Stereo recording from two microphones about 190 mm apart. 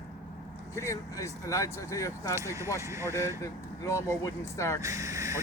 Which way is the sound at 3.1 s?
15° left (ahead or behind).